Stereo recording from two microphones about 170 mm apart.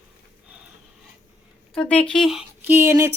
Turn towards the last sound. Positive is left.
turn(degrees=-15)  # may be behind; listen again after turning